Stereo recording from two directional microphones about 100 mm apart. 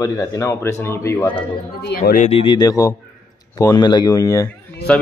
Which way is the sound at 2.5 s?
40° left (ahead or behind).